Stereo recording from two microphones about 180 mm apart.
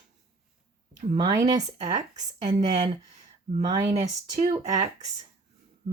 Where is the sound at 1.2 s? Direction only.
25° right (ahead or behind).